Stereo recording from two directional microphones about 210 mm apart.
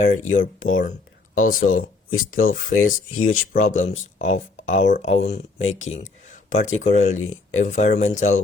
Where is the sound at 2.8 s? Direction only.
40° left (ahead or behind).